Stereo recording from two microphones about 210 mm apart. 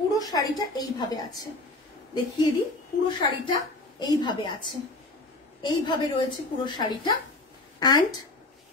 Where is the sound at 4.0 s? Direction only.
20° left (ahead or behind).